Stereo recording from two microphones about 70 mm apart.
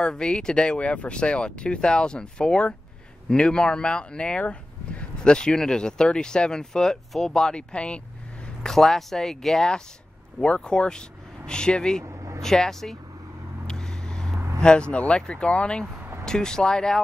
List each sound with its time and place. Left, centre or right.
0.0 s speech: centre
8.6 s speech: centre
12.0 s vehicle: right
12.4 s speech: centre
13.7 s vehicle: centre
14.6 s speech: centre